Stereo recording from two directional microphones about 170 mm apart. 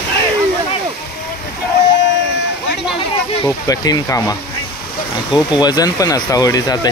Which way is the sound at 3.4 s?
20° left (ahead or behind).